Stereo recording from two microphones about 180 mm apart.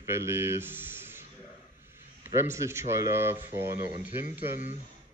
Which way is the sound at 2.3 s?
15° right (ahead or behind).